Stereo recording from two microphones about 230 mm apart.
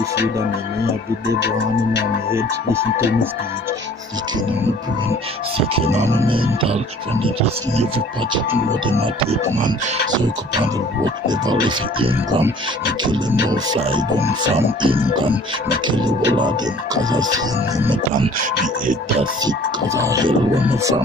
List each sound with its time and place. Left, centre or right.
2.3 s speech: centre
5.6 s music: right
11.2 s music: centre
14.8 s music: right
19.4 s speech: centre